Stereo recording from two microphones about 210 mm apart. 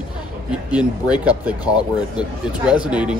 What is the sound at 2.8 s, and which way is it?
Speech, 5° right (ahead or behind).